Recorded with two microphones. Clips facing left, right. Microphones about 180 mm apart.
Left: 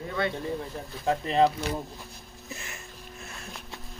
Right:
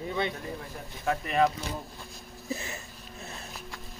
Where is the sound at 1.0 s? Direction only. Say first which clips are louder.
Left 3 dB; 30° left (ahead or behind).